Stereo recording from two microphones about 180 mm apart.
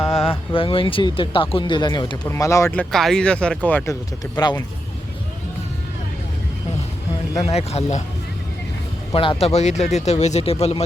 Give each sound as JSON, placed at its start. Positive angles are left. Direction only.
{"t": 0.0, "sound": "speech", "side_deg": 30}
{"t": 2.9, "sound": "speech", "side_deg": 0}
{"t": 4.4, "sound": "speech", "side_deg": 20}
{"t": 7.3, "sound": "speech", "side_deg": 30}
{"t": 9.1, "sound": "speech", "side_deg": 30}